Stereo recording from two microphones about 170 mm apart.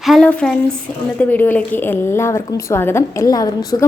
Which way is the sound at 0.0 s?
Centre (ahead or behind).